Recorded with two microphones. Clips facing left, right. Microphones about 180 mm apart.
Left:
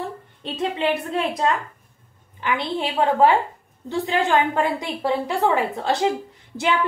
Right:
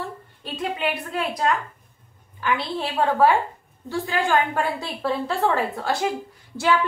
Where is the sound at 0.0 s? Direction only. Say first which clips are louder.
Left 3 dB; 25° left (ahead or behind).